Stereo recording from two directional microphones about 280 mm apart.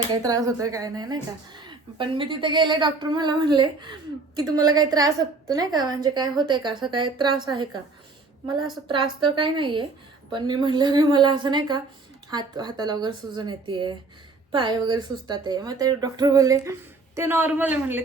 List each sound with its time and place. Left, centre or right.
0.1 s speech: centre
9.2 s speech: centre